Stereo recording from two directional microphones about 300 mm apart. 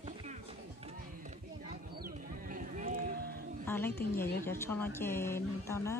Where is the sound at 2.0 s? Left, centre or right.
Right.